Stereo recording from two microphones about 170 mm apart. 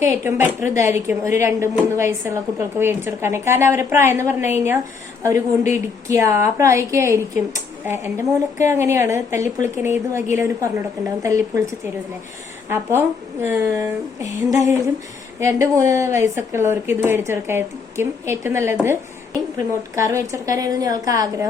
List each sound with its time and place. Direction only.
0.0 s a woman's voice: 15° right (ahead or behind)